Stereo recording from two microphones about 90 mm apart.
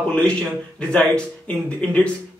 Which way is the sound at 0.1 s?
10° left (ahead or behind).